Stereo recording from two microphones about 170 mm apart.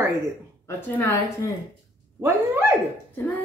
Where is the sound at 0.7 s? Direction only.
15° left (ahead or behind).